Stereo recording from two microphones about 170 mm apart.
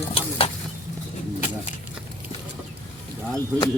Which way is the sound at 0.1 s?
35° left (ahead or behind).